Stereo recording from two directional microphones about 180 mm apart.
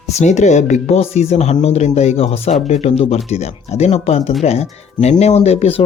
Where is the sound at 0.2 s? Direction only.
40° left (ahead or behind).